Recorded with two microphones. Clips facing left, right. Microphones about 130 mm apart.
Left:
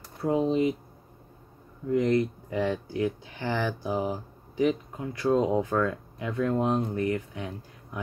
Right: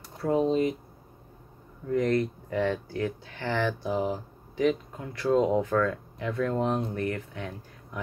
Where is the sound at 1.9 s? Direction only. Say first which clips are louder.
Left 1 dB; 15° left (ahead or behind).